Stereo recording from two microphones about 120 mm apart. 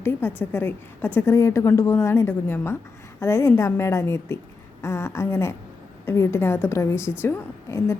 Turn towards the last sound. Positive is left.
turn(degrees=20)  # may be behind; listen again after turning